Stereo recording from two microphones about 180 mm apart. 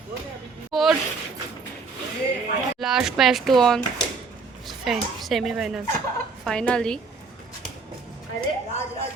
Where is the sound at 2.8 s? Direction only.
Centre (ahead or behind).